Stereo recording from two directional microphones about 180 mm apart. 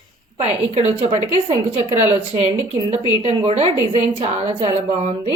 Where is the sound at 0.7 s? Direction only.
35° right (ahead or behind).